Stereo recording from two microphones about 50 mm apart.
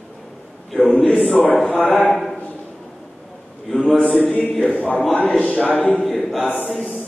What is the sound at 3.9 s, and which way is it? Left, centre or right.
Speech, centre.